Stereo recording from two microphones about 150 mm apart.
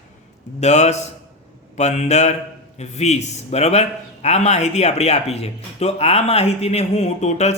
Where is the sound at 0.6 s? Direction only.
50° left (ahead or behind).